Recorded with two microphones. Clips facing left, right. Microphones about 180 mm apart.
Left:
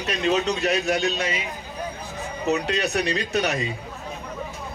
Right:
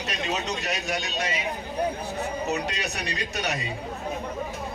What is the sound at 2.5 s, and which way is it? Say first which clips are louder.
Speech: left 6 dB; 60° left (ahead or behind).